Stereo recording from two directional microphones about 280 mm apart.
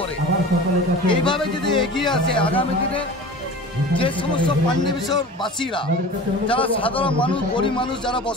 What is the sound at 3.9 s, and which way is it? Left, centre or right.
Speech, centre.